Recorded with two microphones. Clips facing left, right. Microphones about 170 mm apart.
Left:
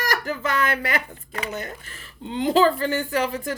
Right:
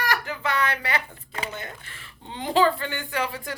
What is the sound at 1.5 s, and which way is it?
Speech, 40° left (ahead or behind).